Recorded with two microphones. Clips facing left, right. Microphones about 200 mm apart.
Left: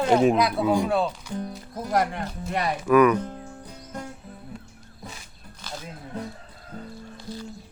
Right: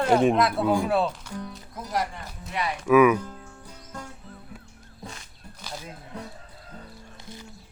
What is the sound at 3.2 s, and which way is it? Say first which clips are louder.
Music: left 5 dB; 20° left (ahead or behind).